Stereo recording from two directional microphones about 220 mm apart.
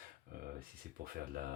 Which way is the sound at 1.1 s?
40° right (ahead or behind).